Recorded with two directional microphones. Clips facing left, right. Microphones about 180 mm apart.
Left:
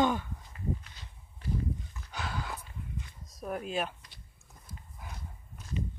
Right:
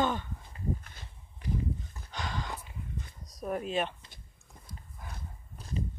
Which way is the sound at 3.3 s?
Centre (ahead or behind).